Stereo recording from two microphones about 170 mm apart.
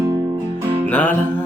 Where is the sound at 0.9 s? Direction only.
10° left (ahead or behind).